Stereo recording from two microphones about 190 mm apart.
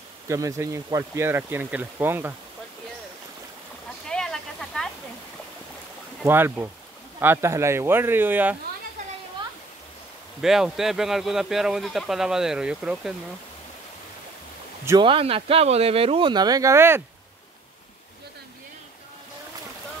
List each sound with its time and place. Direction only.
0.3 s speech: 15° right (ahead or behind)
4.1 s a sound: 5° left (ahead or behind)
6.2 s speech: 10° right (ahead or behind)
10.4 s speech: centre (ahead or behind)
14.9 s speech: 25° right (ahead or behind)